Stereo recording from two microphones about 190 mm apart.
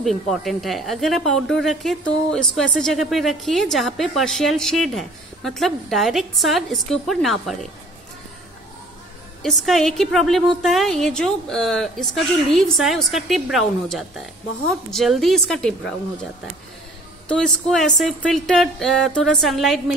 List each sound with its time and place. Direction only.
0.0 s a woman's voice: centre (ahead or behind)
9.4 s a woman's voice: centre (ahead or behind)
17.3 s a woman's voice: 5° left (ahead or behind)